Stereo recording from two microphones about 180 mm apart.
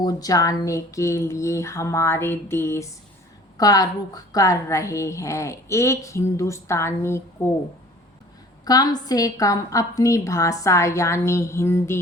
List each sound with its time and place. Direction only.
0.0 s a woman's voice: 20° left (ahead or behind)
8.6 s a woman's voice: 20° left (ahead or behind)